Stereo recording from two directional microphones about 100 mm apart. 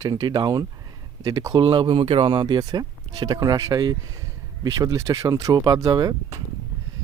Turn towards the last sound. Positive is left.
turn(degrees=-40)  # may be behind; listen again after turning